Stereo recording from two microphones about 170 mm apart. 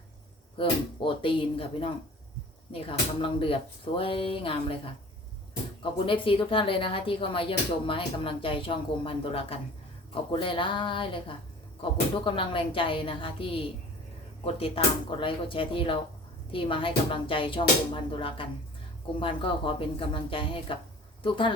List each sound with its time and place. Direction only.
0.5 s speech: 30° left (ahead or behind)
5.8 s speech: 30° left (ahead or behind)
15.2 s speech: 30° left (ahead or behind)